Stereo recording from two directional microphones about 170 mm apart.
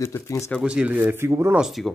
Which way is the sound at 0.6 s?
5° right (ahead or behind).